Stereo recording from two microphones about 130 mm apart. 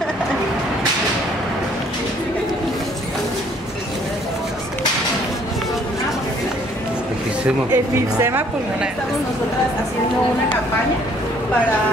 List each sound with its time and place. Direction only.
7.4 s speech: 20° right (ahead or behind)